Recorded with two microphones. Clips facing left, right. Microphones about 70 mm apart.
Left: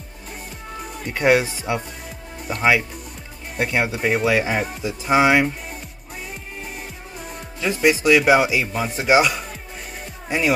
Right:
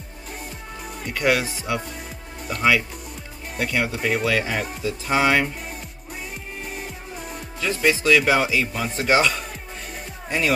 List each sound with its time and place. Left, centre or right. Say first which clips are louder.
1.0 s speech: left 4 dB; left
7.6 s speech: left 3 dB; centre